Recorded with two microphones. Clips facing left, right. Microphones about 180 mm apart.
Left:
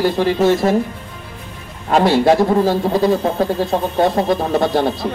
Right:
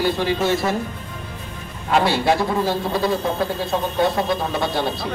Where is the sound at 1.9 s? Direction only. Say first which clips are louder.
Left 5 dB; 45° left (ahead or behind).